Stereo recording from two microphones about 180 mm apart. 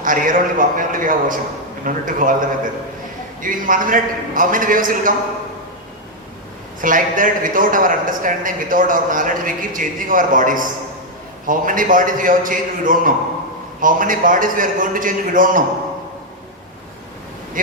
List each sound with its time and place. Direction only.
0.0 s a man's voice: 50° right (ahead or behind)
6.8 s a man's voice: 50° right (ahead or behind)